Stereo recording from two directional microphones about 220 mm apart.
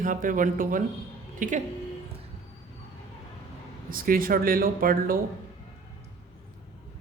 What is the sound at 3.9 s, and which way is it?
Speech, 40° right (ahead or behind).